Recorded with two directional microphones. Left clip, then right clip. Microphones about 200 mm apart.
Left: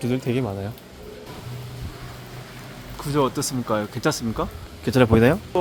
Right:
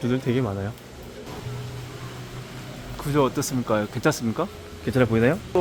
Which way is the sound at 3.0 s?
Centre (ahead or behind).